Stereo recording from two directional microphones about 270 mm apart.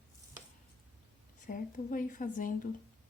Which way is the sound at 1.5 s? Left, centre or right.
Left.